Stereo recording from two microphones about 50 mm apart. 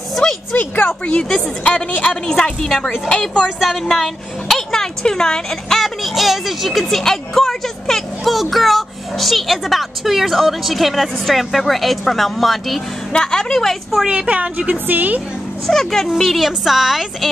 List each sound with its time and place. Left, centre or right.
0.1 s a sound: centre
0.5 s a woman's voice: left; by 3.4 s centre
3.4 s a woman's voice: centre
4.6 s a woman's voice: centre
13.1 s a woman's voice: centre
14.0 s a woman's voice: right
15.6 s a woman's voice: centre